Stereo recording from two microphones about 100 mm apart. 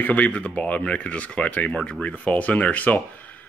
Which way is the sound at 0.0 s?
15° left (ahead or behind).